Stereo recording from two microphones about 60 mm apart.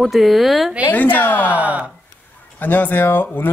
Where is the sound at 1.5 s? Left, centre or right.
Right.